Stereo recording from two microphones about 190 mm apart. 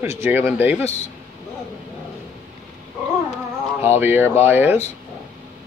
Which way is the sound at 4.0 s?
10° right (ahead or behind).